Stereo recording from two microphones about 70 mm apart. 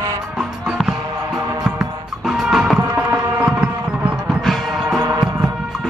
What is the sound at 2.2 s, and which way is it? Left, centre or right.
Music, centre.